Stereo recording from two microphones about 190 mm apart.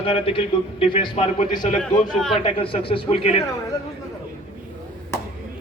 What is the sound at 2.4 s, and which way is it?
Speech, 30° left (ahead or behind).